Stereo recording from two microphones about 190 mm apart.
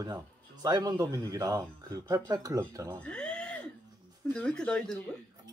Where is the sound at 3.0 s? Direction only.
5° left (ahead or behind).